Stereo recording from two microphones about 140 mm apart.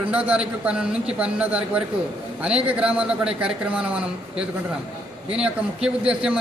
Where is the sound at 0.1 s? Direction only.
10° right (ahead or behind).